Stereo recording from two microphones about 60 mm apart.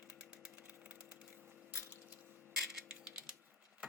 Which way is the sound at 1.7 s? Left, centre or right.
Right.